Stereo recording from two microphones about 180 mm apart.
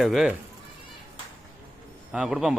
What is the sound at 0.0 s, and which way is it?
Speech, centre (ahead or behind).